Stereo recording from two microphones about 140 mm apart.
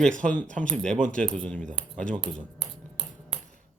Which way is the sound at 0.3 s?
70° right (ahead or behind).